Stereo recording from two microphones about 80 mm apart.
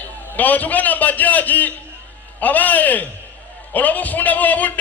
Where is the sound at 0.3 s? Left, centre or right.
Left.